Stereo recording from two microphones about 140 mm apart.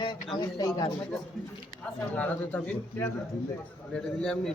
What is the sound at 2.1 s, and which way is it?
A man's voice, 10° left (ahead or behind).